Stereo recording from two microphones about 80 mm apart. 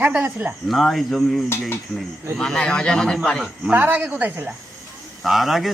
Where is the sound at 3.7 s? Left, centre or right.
Right.